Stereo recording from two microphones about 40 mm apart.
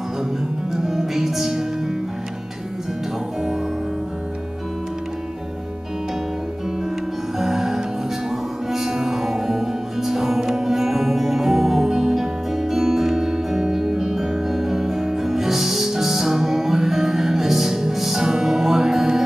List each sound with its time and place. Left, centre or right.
0.7 s music: centre
7.3 s music: centre